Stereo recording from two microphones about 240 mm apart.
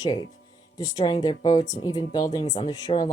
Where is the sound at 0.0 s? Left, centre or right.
Centre.